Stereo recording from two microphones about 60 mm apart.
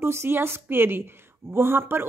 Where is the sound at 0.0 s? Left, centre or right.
Right.